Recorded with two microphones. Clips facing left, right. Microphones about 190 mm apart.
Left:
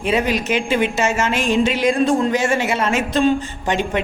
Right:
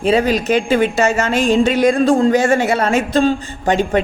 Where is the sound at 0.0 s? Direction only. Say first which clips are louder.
Right 4 dB; 35° right (ahead or behind).